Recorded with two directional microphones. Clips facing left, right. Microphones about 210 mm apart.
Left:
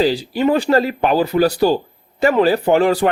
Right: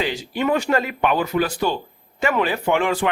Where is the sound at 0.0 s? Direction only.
35° left (ahead or behind).